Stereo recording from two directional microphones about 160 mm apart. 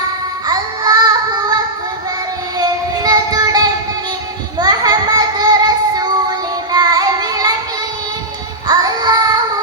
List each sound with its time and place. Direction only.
0.4 s music: 25° right (ahead or behind)
2.6 s music: 25° right (ahead or behind)
6.7 s child singing: 25° right (ahead or behind)
8.6 s music: 25° right (ahead or behind)